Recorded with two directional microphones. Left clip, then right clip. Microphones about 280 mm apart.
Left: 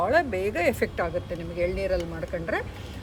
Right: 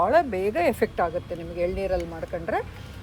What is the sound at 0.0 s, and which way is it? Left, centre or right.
Speech, centre.